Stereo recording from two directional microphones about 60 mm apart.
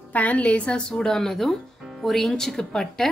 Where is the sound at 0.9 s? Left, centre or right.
Centre.